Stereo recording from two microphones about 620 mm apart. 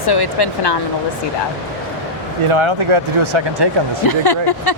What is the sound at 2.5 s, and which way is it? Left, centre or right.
Speech, right.